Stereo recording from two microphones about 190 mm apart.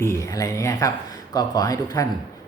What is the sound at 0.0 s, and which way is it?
A woman's voice, 15° left (ahead or behind).